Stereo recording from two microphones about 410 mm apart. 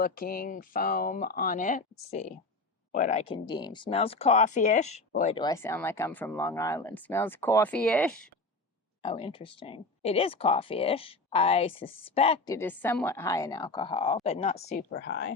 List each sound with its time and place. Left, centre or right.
0.0 s speech: left; by 8.1 s centre
9.0 s speech: centre